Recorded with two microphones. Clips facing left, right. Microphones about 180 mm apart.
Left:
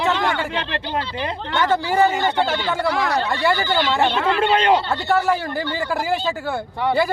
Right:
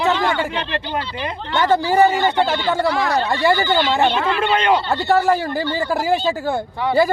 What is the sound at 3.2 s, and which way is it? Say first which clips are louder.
Speech: right 3 dB; 20° right (ahead or behind).